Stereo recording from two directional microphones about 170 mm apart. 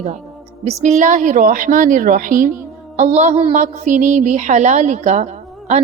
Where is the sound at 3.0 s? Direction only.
40° right (ahead or behind).